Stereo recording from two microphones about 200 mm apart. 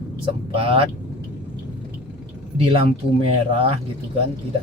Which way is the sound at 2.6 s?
30° right (ahead or behind).